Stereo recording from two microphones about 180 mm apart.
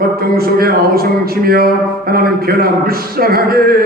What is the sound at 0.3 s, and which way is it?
Speech, 55° right (ahead or behind).